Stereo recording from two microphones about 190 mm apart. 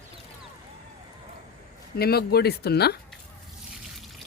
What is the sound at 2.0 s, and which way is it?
Speech, 55° left (ahead or behind).